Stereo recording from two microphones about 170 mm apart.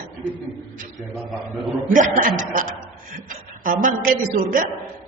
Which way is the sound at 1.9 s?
50° right (ahead or behind).